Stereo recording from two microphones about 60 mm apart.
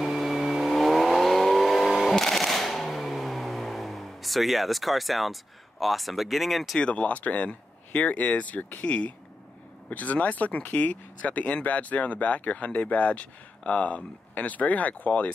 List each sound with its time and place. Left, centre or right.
0.0 s vehicle: centre
6.8 s speech: centre